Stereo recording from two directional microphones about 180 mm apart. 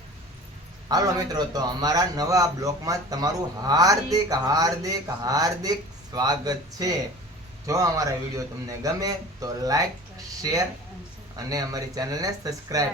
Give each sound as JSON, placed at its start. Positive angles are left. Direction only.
{"t": 0.9, "sound": "a man's voice", "side_deg": -20}